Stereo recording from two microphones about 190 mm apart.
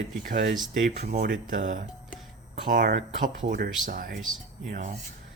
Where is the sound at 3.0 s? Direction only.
35° right (ahead or behind).